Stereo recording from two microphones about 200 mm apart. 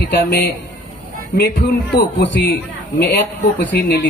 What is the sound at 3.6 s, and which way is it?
Speech, 55° left (ahead or behind).